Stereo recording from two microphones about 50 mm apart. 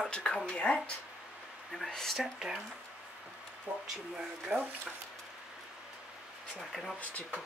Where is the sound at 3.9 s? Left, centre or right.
Centre.